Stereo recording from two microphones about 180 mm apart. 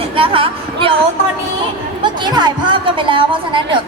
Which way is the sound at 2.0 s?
25° right (ahead or behind).